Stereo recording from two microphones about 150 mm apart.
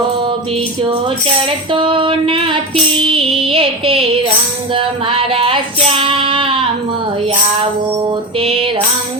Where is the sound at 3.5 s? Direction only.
40° right (ahead or behind).